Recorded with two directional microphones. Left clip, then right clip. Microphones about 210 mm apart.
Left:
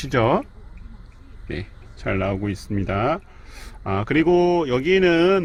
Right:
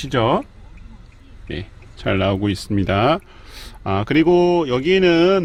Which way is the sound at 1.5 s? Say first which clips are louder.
Right 2 dB; 5° right (ahead or behind).